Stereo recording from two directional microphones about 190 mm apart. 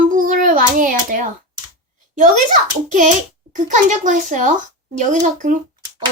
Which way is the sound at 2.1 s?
40° right (ahead or behind).